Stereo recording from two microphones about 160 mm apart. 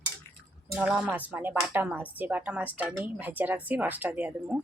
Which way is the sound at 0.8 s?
5° right (ahead or behind).